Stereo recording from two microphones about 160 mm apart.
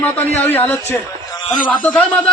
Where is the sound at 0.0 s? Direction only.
10° left (ahead or behind).